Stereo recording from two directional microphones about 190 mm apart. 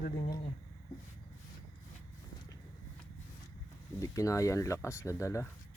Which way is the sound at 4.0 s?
15° left (ahead or behind).